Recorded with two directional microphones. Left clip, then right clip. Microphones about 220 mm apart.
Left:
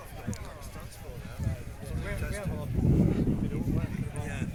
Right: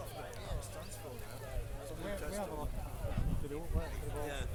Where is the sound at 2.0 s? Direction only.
45° right (ahead or behind).